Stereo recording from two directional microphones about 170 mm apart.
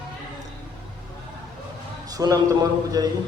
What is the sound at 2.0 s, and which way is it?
A man's voice, 20° right (ahead or behind).